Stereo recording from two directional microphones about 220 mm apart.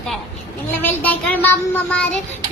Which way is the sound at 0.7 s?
10° left (ahead or behind).